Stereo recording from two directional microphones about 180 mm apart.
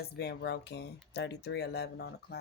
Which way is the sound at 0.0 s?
65° left (ahead or behind).